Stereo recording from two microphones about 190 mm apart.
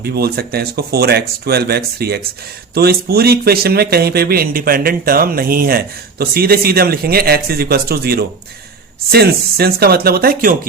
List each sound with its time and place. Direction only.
0.0 s speech: 55° right (ahead or behind)